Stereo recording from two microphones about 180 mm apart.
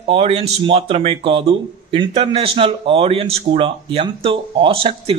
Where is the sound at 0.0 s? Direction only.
35° right (ahead or behind).